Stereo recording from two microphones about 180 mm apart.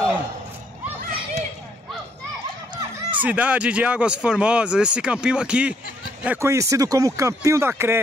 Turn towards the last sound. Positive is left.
turn(degrees=-15)  # may be behind; listen again after turning